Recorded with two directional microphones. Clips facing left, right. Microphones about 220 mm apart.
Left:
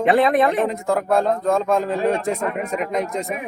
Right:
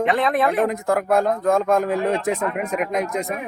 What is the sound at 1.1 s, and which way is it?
Speech, 15° right (ahead or behind).